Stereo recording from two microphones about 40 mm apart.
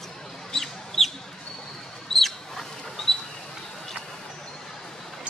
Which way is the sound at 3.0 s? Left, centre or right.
Centre.